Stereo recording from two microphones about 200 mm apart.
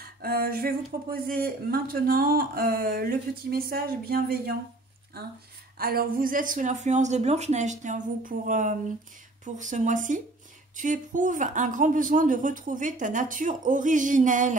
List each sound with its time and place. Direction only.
0.0 s speech: 50° right (ahead or behind)